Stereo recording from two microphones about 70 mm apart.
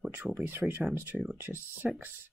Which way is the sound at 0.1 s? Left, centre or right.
Right.